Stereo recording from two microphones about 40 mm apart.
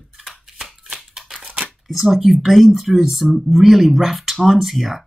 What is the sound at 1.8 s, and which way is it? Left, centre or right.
Speech, centre.